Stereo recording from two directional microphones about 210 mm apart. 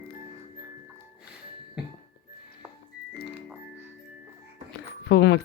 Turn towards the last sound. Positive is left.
turn(degrees=55)  # may be behind; listen again after turning